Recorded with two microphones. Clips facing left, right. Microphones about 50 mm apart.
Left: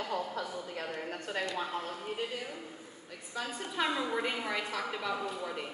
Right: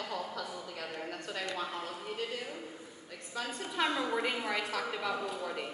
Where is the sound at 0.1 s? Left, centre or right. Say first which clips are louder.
Left 3 dB; centre.